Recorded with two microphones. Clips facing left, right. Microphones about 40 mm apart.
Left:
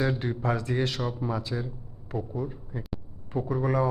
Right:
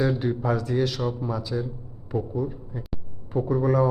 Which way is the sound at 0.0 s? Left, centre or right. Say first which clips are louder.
Right 3 dB; centre.